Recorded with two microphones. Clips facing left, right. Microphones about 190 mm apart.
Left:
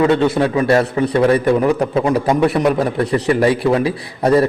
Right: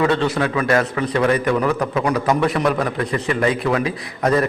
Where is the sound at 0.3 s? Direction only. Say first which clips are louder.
Left 4 dB; 30° left (ahead or behind).